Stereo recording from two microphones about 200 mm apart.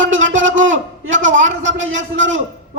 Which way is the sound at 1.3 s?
65° right (ahead or behind).